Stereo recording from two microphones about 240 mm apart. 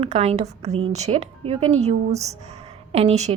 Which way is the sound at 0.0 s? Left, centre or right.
Right.